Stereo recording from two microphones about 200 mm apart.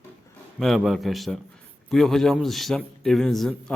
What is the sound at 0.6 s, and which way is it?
A man's voice, centre (ahead or behind).